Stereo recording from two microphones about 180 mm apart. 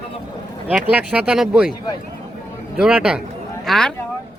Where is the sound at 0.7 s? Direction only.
5° right (ahead or behind).